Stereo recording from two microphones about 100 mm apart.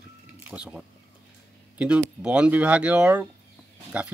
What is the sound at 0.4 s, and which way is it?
Speech, 10° right (ahead or behind).